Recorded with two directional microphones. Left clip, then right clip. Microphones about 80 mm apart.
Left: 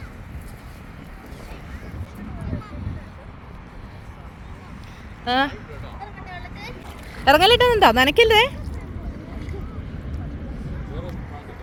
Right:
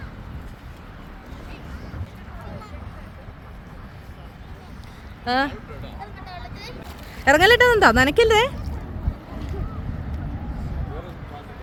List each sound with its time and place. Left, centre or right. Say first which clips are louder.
5.2 s speech: left 1 dB; centre
7.3 s speech: even; centre
7.8 s speech: left 1 dB; centre